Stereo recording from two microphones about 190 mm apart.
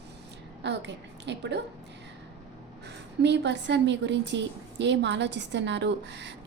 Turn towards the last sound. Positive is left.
turn(degrees=-65)  # may be behind; listen again after turning